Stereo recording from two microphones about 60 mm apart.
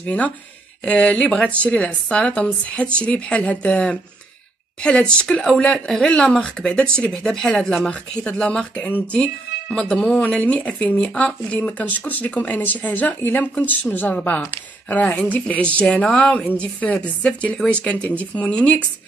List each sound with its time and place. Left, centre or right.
0.0 s a woman's voice: left
8.8 s a woman's voice: left
9.2 s a woman's voice: centre